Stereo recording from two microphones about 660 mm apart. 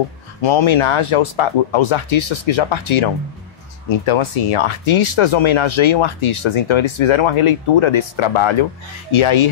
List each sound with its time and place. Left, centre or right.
0.4 s speech: left